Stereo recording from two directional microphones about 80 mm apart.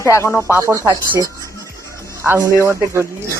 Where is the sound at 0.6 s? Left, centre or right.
Right.